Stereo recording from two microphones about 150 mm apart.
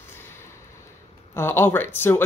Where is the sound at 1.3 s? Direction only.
15° left (ahead or behind).